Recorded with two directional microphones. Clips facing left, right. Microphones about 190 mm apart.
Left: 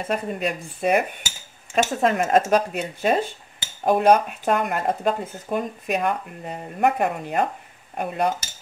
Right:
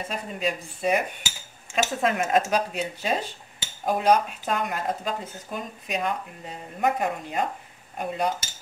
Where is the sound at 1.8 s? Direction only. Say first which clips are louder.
Left 4 dB; 35° left (ahead or behind).